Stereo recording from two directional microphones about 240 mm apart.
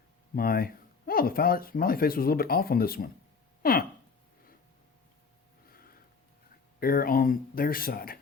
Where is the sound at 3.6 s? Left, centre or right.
Left.